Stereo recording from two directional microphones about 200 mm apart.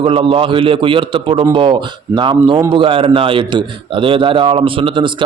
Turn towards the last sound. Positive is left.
turn(degrees=-25)  # may be behind; listen again after turning